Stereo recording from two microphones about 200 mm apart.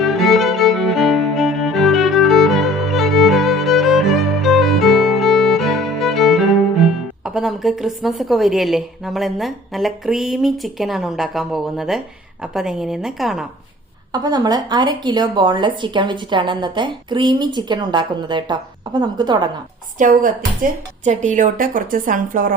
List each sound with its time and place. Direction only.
0.0 s music: centre (ahead or behind)
7.3 s a woman's voice: centre (ahead or behind)
14.1 s a woman's voice: 20° right (ahead or behind)
20.0 s speech: 40° right (ahead or behind)